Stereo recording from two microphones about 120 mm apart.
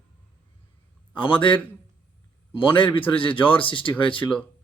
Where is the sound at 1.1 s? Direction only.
45° left (ahead or behind).